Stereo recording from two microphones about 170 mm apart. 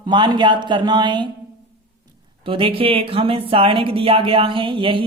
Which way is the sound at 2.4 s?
30° right (ahead or behind).